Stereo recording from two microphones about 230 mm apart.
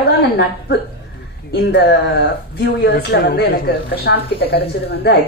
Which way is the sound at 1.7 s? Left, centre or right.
Left.